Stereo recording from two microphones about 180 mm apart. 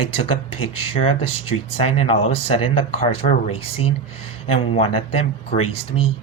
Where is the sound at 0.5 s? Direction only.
30° left (ahead or behind).